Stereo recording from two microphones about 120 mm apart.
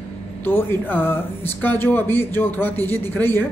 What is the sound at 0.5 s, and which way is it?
Speech, 20° left (ahead or behind).